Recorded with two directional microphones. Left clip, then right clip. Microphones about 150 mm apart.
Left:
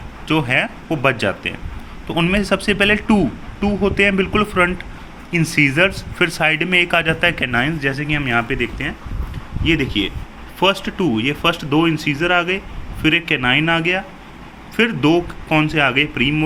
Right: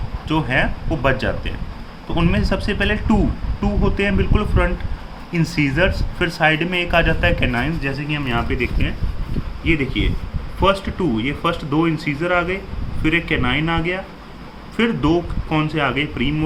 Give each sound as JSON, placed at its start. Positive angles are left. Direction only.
{"t": 0.3, "sound": "speech", "side_deg": 20}